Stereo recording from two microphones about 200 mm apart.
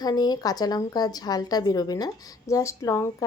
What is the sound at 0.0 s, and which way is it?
A woman's voice, 20° left (ahead or behind).